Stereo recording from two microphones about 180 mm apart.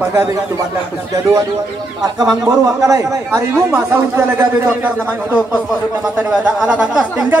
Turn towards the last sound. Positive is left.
turn(degrees=-5)  # may be behind; listen again after turning